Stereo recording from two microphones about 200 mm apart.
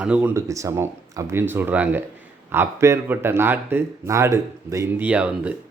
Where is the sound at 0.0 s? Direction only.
5° right (ahead or behind).